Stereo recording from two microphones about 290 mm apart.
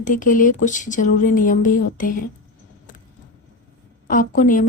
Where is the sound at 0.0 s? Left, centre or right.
Left.